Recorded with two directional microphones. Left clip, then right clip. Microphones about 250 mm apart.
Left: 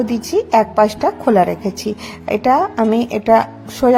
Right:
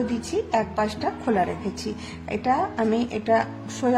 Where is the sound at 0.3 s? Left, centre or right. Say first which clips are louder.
Left 12 dB; left.